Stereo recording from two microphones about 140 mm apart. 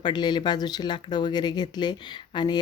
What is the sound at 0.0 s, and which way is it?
Speech, 30° left (ahead or behind).